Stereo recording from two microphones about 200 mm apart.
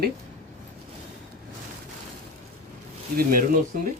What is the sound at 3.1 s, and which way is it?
Speech, 45° right (ahead or behind).